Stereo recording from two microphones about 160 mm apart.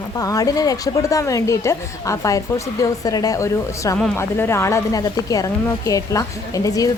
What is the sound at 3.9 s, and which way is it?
Speech, 5° left (ahead or behind).